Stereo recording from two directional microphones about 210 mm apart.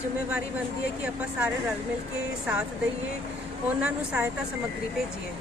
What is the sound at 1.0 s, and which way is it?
Speech, 5° right (ahead or behind).